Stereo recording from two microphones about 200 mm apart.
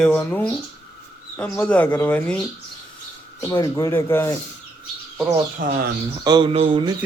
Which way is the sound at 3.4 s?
15° left (ahead or behind).